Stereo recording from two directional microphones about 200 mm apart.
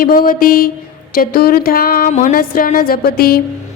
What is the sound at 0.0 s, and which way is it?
A woman's voice, 45° left (ahead or behind).